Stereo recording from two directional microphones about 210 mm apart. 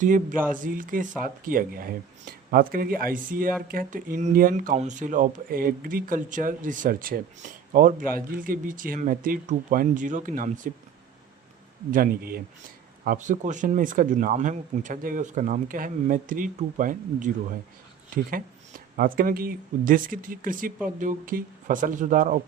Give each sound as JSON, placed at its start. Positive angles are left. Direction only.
{"t": 0.0, "sound": "speech", "side_deg": -40}
{"t": 11.9, "sound": "speech", "side_deg": -45}